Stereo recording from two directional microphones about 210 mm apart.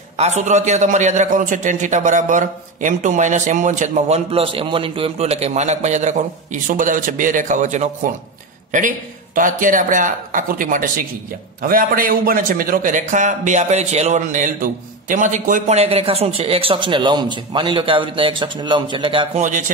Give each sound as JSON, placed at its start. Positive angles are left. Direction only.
{"t": 0.2, "sound": "a man's voice", "side_deg": -35}